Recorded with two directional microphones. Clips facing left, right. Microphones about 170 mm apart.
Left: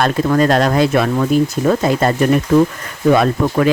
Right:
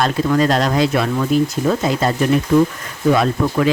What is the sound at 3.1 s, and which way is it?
Speech, 55° left (ahead or behind).